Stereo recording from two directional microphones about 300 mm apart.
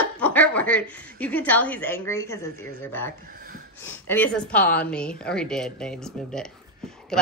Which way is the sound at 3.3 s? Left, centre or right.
Right.